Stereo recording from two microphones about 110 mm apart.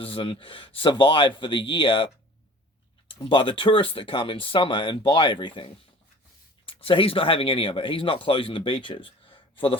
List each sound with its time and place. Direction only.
0.0 s speech: 55° left (ahead or behind)
3.2 s speech: 50° left (ahead or behind)